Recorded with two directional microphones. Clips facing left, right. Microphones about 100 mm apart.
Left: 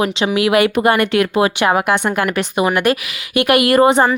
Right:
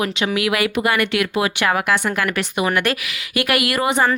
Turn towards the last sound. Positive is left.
turn(degrees=35)  # may be behind; listen again after turning